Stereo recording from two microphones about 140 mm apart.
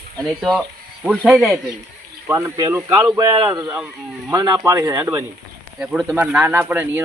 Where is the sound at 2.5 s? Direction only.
25° right (ahead or behind).